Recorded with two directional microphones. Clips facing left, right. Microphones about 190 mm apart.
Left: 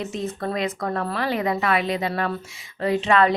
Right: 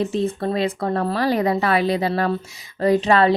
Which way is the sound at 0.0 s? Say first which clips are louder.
Right 6 dB; 30° right (ahead or behind).